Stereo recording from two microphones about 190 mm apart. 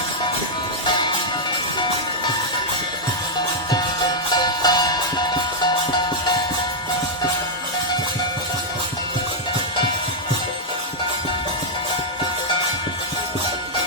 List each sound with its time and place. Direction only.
4.4 s music: 20° left (ahead or behind)